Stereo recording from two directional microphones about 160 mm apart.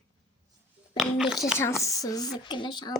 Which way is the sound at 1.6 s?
20° left (ahead or behind).